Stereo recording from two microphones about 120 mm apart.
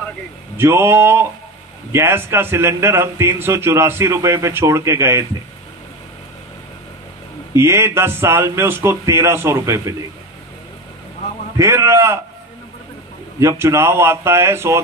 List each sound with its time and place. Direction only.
0.6 s speech: 20° right (ahead or behind)
7.5 s speech: 25° right (ahead or behind)
11.5 s speech: 25° right (ahead or behind)
13.4 s speech: 25° right (ahead or behind)